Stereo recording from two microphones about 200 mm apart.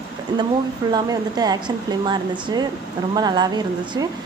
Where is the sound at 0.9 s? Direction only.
20° right (ahead or behind).